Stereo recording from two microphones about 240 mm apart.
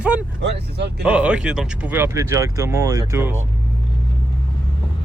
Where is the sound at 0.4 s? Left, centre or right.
Right.